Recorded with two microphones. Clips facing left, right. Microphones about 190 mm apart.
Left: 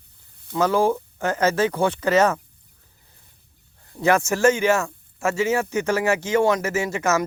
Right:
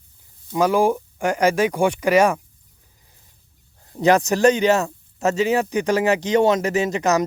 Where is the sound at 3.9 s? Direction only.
20° right (ahead or behind).